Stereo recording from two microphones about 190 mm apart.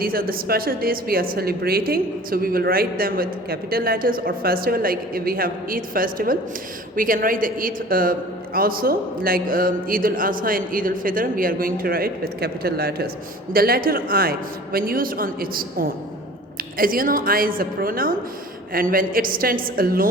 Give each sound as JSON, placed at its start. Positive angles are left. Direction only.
{"t": 0.0, "sound": "a woman's voice", "side_deg": -50}